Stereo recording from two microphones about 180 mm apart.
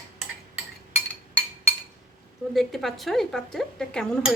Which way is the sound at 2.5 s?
Centre (ahead or behind).